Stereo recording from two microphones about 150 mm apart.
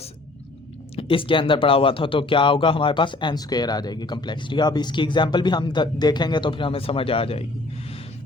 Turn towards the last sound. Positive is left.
turn(degrees=40)  # may be behind; listen again after turning